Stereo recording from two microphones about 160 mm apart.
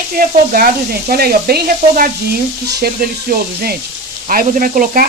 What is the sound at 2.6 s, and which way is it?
Speech, 75° right (ahead or behind).